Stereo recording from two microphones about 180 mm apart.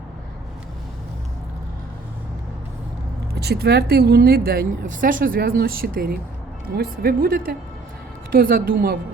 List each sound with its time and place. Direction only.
3.3 s a woman's voice: 65° right (ahead or behind)